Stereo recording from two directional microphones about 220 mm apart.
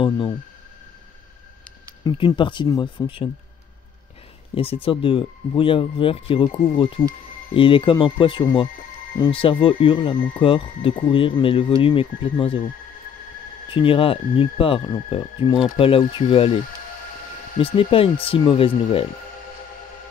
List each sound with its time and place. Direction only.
2.0 s speech: 20° left (ahead or behind)
4.6 s speech: 25° left (ahead or behind)
13.7 s speech: 25° left (ahead or behind)
17.6 s speech: 25° left (ahead or behind)